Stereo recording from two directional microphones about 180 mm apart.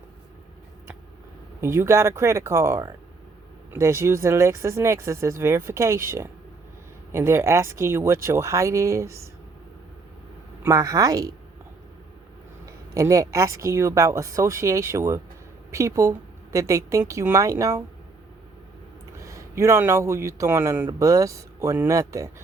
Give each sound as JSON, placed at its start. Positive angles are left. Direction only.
{"t": 1.6, "sound": "a man's voice", "side_deg": -15}
{"t": 10.6, "sound": "speech", "side_deg": -15}
{"t": 12.6, "sound": "a man's voice", "side_deg": -15}
{"t": 19.2, "sound": "a man's voice", "side_deg": -15}